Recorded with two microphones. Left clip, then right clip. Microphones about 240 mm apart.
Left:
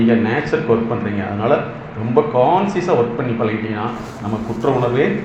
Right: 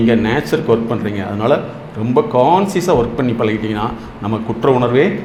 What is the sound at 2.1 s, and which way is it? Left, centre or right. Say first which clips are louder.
A man's voice: right 2 dB; right.